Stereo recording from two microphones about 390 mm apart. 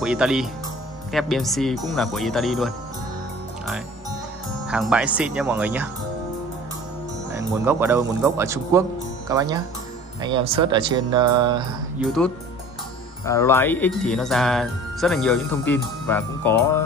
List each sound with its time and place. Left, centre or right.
0.0 s speech: centre
4.6 s speech: centre
7.3 s speech: centre
13.2 s speech: centre